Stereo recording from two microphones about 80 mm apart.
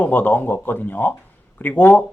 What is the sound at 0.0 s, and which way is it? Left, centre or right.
Speech, left.